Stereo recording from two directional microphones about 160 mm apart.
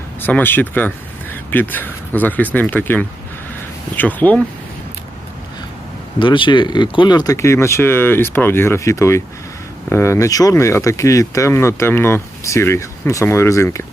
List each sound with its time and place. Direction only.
0.2 s speech: 10° left (ahead or behind)
6.1 s speech: 30° left (ahead or behind)